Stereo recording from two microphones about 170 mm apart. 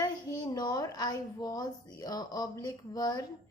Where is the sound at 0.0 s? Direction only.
25° left (ahead or behind).